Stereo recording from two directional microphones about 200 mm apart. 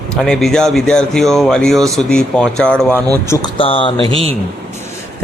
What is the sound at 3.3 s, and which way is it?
Speech, 25° left (ahead or behind).